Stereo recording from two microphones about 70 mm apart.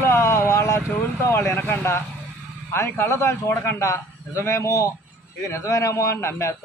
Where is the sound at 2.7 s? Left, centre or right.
Left.